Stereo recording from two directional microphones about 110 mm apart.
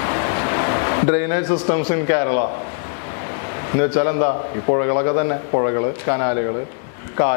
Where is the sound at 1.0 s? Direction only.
20° left (ahead or behind).